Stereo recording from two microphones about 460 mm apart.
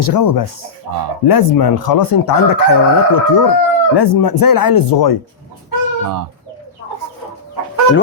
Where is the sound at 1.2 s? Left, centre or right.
Left.